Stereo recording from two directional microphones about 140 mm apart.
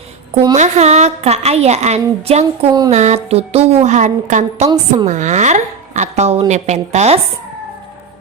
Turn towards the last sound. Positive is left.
turn(degrees=-50)  # may be behind; listen again after turning